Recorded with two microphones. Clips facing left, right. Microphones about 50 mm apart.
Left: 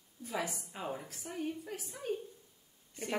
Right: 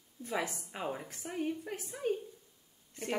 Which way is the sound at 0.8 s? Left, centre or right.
Centre.